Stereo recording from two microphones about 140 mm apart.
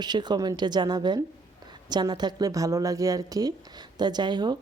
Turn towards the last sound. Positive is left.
turn(degrees=-30)  # may be behind; listen again after turning